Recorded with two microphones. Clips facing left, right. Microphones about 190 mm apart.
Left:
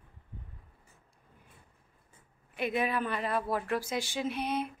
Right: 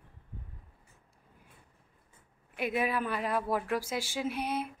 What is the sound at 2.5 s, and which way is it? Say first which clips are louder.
Speech: even; 10° right (ahead or behind).